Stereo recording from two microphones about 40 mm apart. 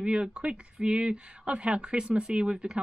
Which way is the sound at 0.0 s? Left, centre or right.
Right.